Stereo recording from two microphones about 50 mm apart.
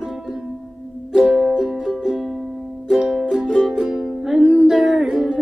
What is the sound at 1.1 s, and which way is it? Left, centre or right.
Music, centre.